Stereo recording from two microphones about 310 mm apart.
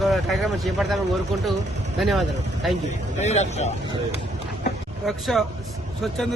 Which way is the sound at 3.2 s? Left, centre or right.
Left.